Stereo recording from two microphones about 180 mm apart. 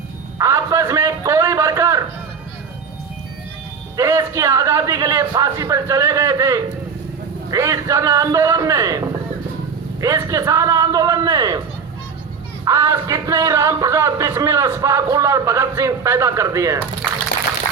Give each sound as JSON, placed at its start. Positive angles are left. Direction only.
{"t": 0.3, "sound": "a sound", "side_deg": -15}
{"t": 3.9, "sound": "speech", "side_deg": -15}
{"t": 12.6, "sound": "speech", "side_deg": -20}